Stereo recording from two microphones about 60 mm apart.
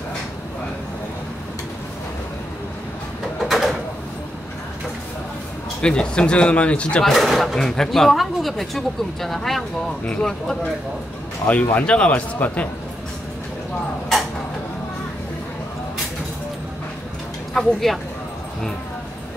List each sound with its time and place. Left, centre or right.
3.4 s a sound: centre
5.8 s speech: centre
7.1 s speech: centre
11.4 s speech: left
17.6 s speech: centre